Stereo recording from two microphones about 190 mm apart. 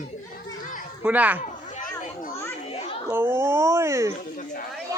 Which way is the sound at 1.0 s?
10° right (ahead or behind).